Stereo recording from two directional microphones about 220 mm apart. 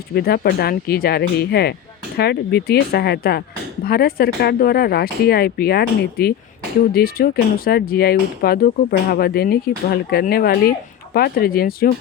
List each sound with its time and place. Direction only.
0.1 s speech: 45° left (ahead or behind)